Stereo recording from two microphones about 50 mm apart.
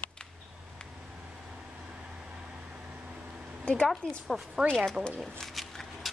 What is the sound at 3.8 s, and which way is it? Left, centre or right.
Speech, centre.